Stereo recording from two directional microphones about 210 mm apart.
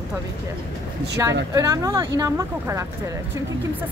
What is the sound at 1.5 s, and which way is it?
Speech, 15° right (ahead or behind).